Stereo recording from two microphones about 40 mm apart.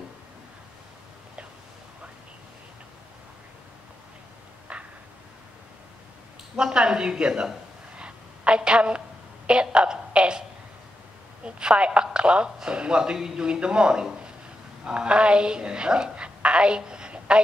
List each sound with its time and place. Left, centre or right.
6.5 s speech: right
7.9 s a sound: right
9.5 s a woman's voice: right
11.4 s a woman's voice: right